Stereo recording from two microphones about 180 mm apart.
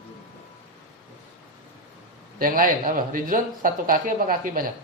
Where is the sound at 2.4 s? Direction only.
50° right (ahead or behind).